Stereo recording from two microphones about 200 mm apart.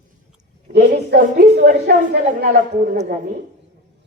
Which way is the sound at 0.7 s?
50° right (ahead or behind).